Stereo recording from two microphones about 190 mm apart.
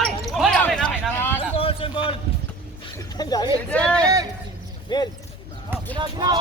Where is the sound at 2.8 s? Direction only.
20° left (ahead or behind).